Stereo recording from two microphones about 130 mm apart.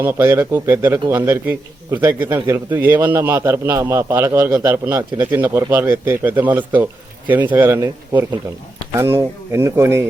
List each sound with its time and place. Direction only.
0.0 s a man's voice: 20° right (ahead or behind)
9.0 s speech: 20° right (ahead or behind)